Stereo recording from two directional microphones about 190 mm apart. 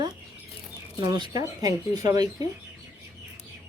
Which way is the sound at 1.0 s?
20° right (ahead or behind).